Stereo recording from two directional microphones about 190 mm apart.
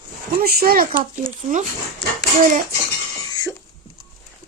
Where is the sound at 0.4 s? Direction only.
50° right (ahead or behind).